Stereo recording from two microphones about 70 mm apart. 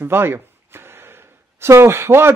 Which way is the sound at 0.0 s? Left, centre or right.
Right.